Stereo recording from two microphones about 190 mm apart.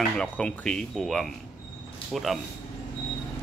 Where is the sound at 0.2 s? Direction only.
5° left (ahead or behind).